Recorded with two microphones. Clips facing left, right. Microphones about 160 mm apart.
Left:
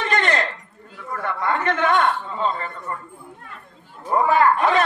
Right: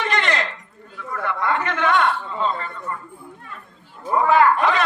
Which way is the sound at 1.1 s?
40° left (ahead or behind).